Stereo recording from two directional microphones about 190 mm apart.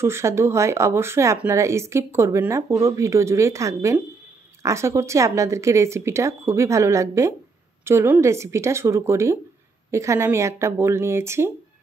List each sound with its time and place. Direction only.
0.0 s speech: 15° right (ahead or behind)